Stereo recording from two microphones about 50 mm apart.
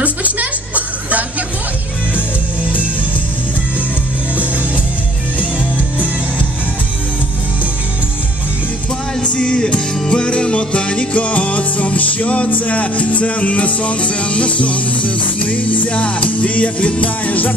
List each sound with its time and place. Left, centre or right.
0.0 s music: right
9.2 s music: left